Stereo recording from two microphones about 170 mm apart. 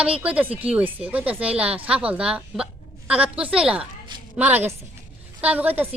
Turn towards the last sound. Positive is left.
turn(degrees=-10)  # may be behind; listen again after turning